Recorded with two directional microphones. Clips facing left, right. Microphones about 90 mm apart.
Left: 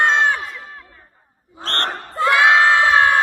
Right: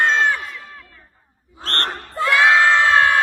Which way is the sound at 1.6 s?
35° left (ahead or behind).